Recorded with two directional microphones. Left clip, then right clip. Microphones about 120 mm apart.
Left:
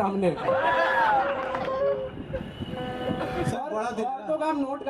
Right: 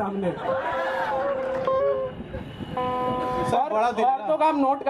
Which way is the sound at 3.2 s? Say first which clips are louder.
Right 6 dB; 15° right (ahead or behind).